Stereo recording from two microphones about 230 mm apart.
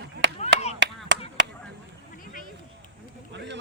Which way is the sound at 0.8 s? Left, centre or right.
Right.